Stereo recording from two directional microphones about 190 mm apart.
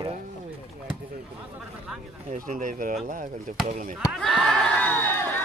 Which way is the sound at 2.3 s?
45° right (ahead or behind).